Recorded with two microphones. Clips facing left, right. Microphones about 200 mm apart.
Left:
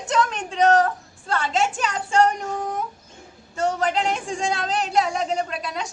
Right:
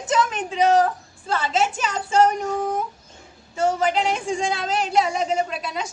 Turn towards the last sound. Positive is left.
turn(degrees=0)  # may be behind; listen again after turning